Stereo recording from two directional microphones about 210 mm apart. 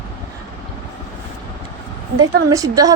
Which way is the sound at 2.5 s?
15° right (ahead or behind).